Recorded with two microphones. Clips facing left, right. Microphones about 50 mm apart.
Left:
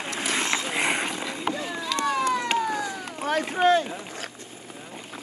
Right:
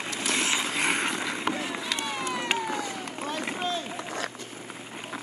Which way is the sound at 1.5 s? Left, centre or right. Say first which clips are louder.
Left 2 dB; centre.